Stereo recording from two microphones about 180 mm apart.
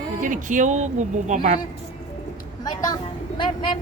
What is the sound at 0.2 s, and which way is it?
Speech, 45° right (ahead or behind).